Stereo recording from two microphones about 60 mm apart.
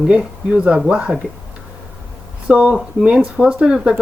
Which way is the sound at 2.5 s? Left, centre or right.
Centre.